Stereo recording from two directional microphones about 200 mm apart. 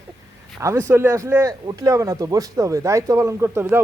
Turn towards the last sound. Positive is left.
turn(degrees=-10)  # may be behind; listen again after turning